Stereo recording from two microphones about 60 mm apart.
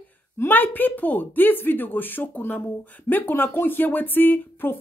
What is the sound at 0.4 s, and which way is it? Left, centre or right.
Speech, left.